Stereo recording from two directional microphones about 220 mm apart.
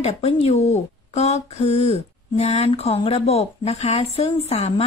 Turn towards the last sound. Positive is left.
turn(degrees=30)  # may be behind; listen again after turning